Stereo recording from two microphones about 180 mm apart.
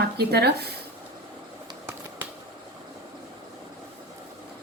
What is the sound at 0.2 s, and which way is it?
Speech, 60° right (ahead or behind).